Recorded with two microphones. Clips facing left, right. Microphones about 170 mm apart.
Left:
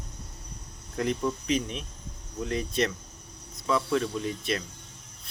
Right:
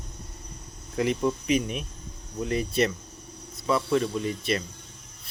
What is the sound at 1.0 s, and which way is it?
Speech, 5° right (ahead or behind).